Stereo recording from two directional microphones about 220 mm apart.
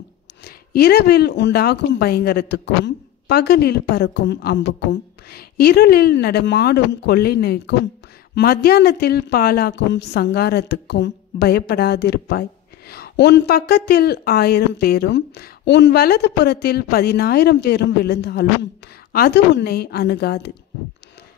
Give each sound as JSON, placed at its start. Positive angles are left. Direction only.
{"t": 0.4, "sound": "a woman's voice", "side_deg": 45}